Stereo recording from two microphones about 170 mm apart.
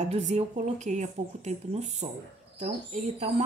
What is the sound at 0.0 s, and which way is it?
Speech, 40° right (ahead or behind).